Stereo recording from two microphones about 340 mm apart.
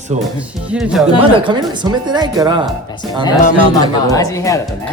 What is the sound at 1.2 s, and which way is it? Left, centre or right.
Speech, centre.